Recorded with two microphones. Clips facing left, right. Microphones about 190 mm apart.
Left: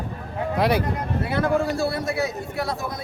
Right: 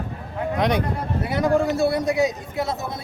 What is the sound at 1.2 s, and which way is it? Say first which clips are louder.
A man's voice: right 2 dB; 15° right (ahead or behind).